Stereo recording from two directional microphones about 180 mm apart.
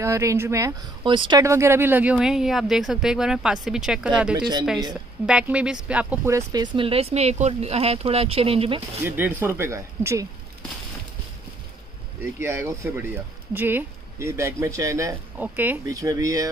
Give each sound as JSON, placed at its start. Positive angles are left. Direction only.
{"t": 0.0, "sound": "speech", "side_deg": -15}
{"t": 9.0, "sound": "speech", "side_deg": -10}
{"t": 12.4, "sound": "speech", "side_deg": -15}